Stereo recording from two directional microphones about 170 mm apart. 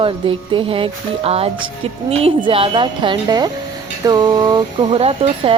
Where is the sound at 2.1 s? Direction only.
35° right (ahead or behind).